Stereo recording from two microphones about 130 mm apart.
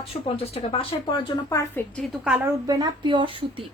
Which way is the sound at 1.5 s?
25° left (ahead or behind).